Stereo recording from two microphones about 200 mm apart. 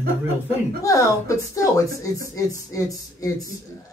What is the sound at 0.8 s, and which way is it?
Speech, 15° left (ahead or behind).